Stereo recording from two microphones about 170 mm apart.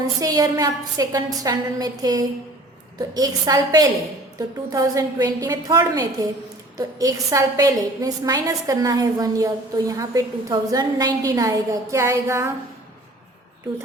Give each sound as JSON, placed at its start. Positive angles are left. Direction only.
{"t": 0.0, "sound": "a woman's voice", "side_deg": -20}